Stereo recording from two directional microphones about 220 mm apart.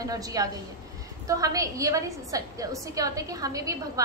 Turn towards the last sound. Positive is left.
turn(degrees=-15)  # may be behind; listen again after turning